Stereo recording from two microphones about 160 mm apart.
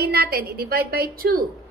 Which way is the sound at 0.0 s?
85° right.